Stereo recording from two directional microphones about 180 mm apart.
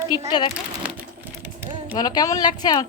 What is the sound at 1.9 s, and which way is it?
Speech, 20° left (ahead or behind).